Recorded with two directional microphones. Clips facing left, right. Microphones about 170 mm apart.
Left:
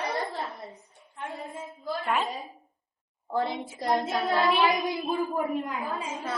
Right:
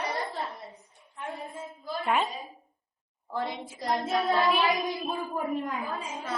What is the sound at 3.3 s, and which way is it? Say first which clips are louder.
Speech: left 4 dB; 25° left (ahead or behind).